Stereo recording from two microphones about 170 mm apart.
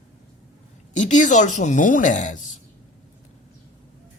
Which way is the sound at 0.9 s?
45° left (ahead or behind).